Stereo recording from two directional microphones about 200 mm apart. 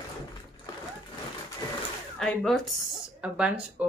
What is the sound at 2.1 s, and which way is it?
Speech, centre (ahead or behind).